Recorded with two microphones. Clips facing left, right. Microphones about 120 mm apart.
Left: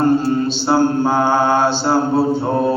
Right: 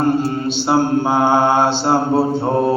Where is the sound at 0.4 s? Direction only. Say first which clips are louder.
Left 1 dB; 20° right (ahead or behind).